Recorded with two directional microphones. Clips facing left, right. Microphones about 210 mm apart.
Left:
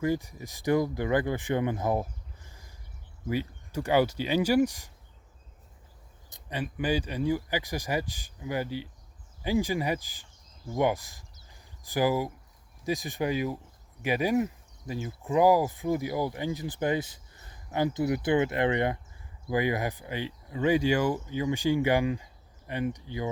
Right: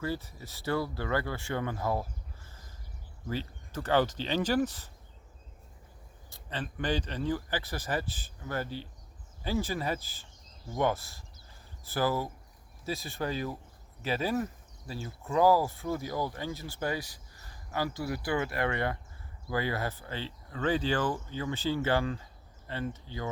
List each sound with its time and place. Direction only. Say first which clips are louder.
0.0 s speech: left 6 dB; 15° left (ahead or behind)
6.3 s speech: left 4 dB; 10° left (ahead or behind)